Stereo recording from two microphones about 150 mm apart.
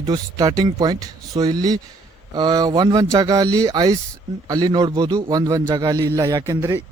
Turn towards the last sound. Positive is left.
turn(degrees=-20)  # may be behind; listen again after turning